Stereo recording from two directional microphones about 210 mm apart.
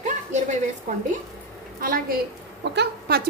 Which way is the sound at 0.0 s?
35° right (ahead or behind).